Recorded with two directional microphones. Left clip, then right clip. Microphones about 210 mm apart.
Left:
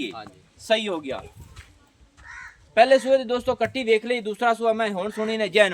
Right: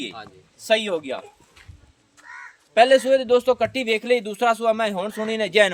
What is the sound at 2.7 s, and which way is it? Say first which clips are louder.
A man's voice: right 1 dB; 50° right (ahead or behind).